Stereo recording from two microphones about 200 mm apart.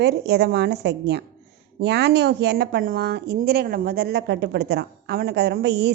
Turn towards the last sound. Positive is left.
turn(degrees=-60)  # may be behind; listen again after turning